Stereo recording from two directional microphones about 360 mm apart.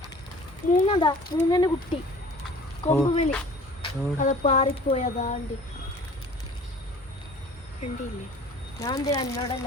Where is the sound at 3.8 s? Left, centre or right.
Centre.